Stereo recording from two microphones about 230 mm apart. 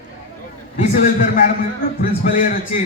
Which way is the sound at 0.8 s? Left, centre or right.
Left.